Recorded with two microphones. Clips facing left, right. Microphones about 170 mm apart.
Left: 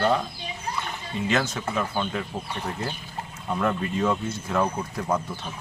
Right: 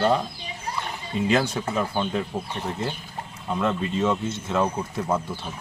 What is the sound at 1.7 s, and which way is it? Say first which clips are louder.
Speech: right 1 dB; 15° right (ahead or behind).